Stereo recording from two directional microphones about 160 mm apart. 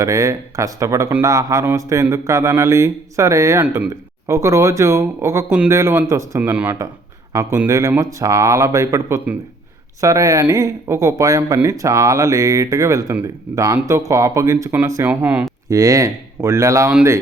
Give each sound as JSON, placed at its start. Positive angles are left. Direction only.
{"t": 0.0, "sound": "speech", "side_deg": -20}
{"t": 15.7, "sound": "speech", "side_deg": -20}